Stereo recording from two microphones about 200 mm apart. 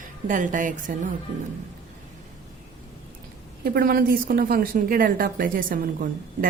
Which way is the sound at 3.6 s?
50° right (ahead or behind).